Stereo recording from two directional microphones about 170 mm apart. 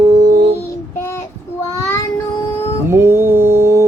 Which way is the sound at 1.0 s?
15° left (ahead or behind).